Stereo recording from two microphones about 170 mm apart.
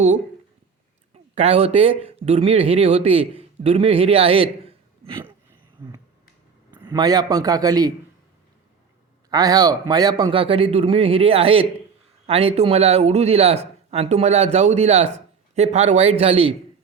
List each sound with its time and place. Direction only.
1.1 s speech: 35° right (ahead or behind)
6.8 s a man's voice: 25° right (ahead or behind)
9.3 s speech: 20° right (ahead or behind)